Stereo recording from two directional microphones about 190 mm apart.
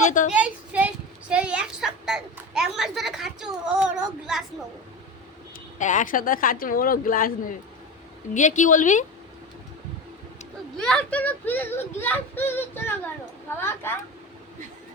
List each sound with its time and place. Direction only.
0.0 s a child's voice: 40° left (ahead or behind)
0.3 s a sound: 5° right (ahead or behind)
5.8 s speech: 40° left (ahead or behind)
10.8 s a child's voice: 5° left (ahead or behind)